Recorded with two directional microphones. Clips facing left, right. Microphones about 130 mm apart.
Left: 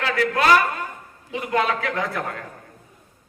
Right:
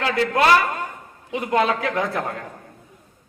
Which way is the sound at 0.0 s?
30° right (ahead or behind).